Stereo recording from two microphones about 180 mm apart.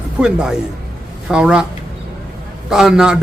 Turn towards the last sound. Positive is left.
turn(degrees=-5)  # may be behind; listen again after turning